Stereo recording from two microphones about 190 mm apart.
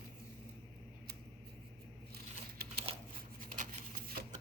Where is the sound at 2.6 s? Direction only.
55° right (ahead or behind).